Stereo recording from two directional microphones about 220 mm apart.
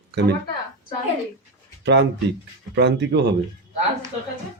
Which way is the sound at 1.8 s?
50° right (ahead or behind).